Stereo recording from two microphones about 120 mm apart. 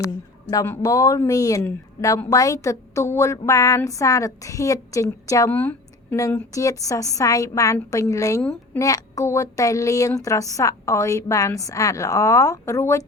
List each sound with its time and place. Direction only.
0.5 s a woman's voice: 20° left (ahead or behind)
5.5 s a woman's voice: 15° left (ahead or behind)
6.1 s a woman's voice: 25° left (ahead or behind)